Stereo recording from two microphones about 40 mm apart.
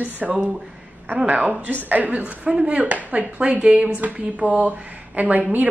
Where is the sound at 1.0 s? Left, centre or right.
Right.